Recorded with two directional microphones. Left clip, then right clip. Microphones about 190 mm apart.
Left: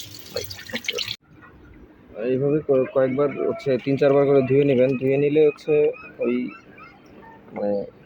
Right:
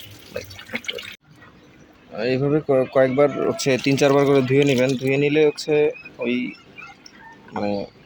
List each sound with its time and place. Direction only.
0.3 s water: centre (ahead or behind)
2.1 s speech: 85° right; by 6.5 s 55° right (ahead or behind)